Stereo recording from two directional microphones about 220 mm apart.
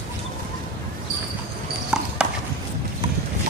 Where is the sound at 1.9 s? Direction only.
5° right (ahead or behind).